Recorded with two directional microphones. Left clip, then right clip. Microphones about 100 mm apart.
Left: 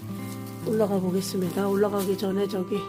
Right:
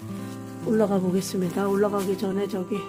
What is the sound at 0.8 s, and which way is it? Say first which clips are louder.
Speech: right 1 dB; 60° right (ahead or behind).